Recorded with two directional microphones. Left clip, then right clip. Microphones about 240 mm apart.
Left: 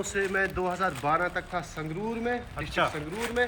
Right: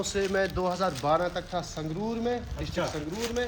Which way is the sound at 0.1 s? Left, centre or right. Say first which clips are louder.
Left 1 dB; right.